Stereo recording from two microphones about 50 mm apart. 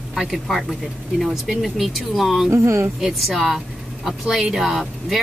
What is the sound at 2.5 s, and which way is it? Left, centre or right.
Speech, right.